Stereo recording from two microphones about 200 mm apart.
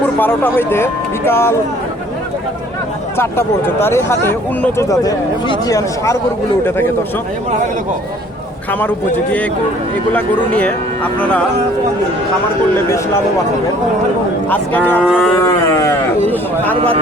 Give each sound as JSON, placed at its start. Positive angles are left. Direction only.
{"t": 0.0, "sound": "speech", "side_deg": 10}
{"t": 3.2, "sound": "speech", "side_deg": 10}
{"t": 10.1, "sound": "speech", "side_deg": 10}
{"t": 14.5, "sound": "speech", "side_deg": 10}
{"t": 15.4, "sound": "speech", "side_deg": 15}